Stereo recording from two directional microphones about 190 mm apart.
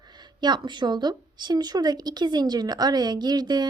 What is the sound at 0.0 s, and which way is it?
A woman's voice, 20° right (ahead or behind).